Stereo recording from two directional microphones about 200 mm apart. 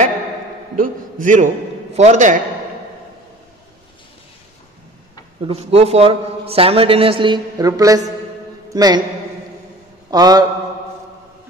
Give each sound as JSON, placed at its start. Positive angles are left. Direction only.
{"t": 0.7, "sound": "a man's voice", "side_deg": -40}
{"t": 5.5, "sound": "a man's voice", "side_deg": -30}
{"t": 10.1, "sound": "a man's voice", "side_deg": -20}